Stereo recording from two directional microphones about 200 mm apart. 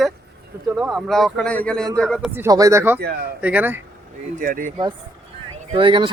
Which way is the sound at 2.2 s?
10° right (ahead or behind).